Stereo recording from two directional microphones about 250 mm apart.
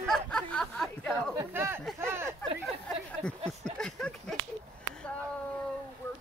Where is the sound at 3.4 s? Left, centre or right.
Centre.